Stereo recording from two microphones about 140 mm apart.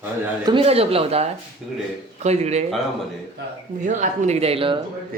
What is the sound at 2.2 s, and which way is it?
Speech, 50° right (ahead or behind).